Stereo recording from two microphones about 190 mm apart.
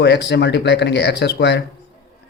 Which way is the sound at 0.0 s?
65° left (ahead or behind).